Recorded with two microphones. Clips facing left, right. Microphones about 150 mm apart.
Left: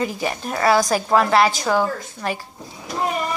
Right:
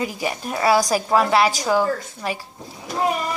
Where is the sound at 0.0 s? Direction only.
10° right (ahead or behind).